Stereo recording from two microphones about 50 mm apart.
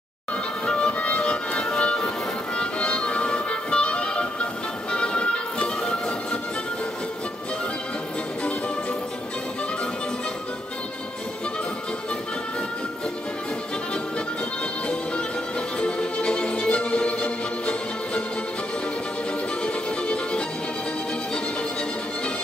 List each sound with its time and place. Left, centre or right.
0.7 s music: left
15.8 s music: left
19.6 s music: left